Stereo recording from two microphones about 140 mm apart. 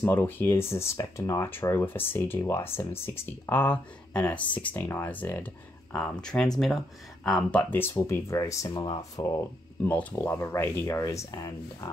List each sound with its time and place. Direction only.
0.0 s speech: 15° left (ahead or behind)
7.9 s speech: 25° left (ahead or behind)
9.8 s speech: 15° left (ahead or behind)